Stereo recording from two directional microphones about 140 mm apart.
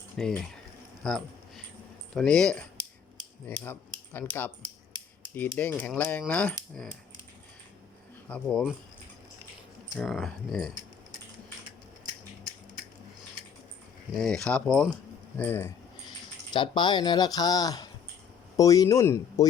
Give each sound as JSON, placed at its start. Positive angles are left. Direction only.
{"t": 0.2, "sound": "speech", "side_deg": 5}
{"t": 5.5, "sound": "speech", "side_deg": 15}
{"t": 8.3, "sound": "speech", "side_deg": 5}
{"t": 10.0, "sound": "speech", "side_deg": 5}
{"t": 14.2, "sound": "speech", "side_deg": 5}
{"t": 16.5, "sound": "speech", "side_deg": 35}